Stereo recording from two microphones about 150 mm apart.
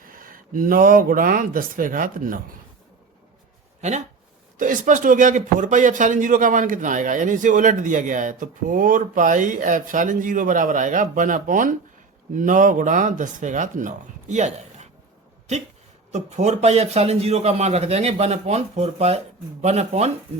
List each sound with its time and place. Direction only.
0.0 s speech: 70° right (ahead or behind)
3.8 s speech: 50° right (ahead or behind)
4.5 s speech: 60° right (ahead or behind)
16.1 s a man's voice: 50° right (ahead or behind)